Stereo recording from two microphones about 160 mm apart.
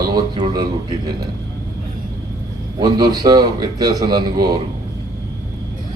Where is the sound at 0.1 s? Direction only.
25° right (ahead or behind).